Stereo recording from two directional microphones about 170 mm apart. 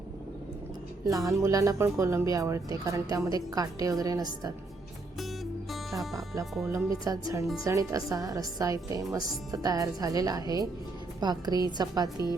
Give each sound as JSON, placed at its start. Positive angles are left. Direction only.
{"t": 1.0, "sound": "speech", "side_deg": -20}
{"t": 5.7, "sound": "music", "side_deg": 0}
{"t": 6.4, "sound": "speech", "side_deg": 0}
{"t": 6.7, "sound": "speech", "side_deg": -20}